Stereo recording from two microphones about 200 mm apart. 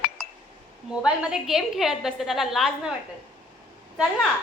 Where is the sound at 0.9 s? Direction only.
5° right (ahead or behind).